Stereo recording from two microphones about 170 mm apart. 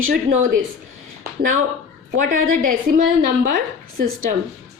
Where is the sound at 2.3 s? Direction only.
55° right (ahead or behind).